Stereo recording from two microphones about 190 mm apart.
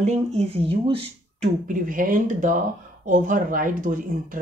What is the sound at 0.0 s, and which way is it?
Speech, 35° right (ahead or behind).